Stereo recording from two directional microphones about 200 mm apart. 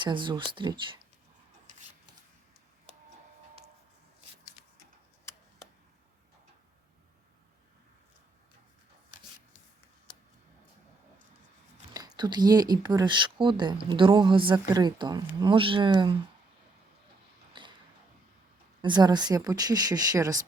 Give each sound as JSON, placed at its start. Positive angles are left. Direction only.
{"t": 0.0, "sound": "speech", "side_deg": -25}
{"t": 11.9, "sound": "speech", "side_deg": -20}
{"t": 17.5, "sound": "a sound", "side_deg": -25}
{"t": 18.8, "sound": "speech", "side_deg": -20}